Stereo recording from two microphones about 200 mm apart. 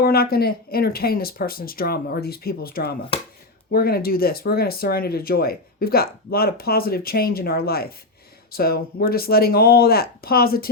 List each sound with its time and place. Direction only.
0.0 s speech: 50° left (ahead or behind)